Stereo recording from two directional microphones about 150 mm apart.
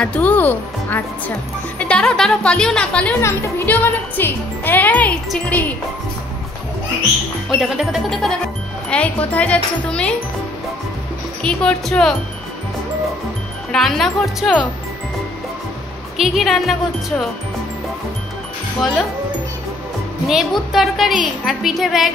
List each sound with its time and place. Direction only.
0.0 s speech: 10° left (ahead or behind)
3.2 s speech: 20° left (ahead or behind)
7.4 s a woman's voice: centre (ahead or behind)
11.4 s a woman's voice: 5° left (ahead or behind)
13.7 s a woman's voice: centre (ahead or behind)
16.2 s a woman's voice: centre (ahead or behind)
20.2 s a woman's voice: centre (ahead or behind)